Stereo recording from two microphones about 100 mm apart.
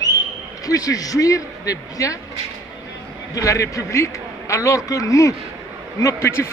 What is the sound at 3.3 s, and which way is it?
A man's voice, 30° left (ahead or behind).